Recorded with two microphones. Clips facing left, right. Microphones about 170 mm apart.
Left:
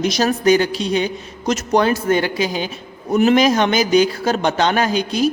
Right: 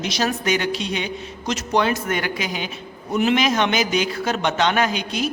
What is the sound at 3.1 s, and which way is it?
A woman's voice, 40° left (ahead or behind).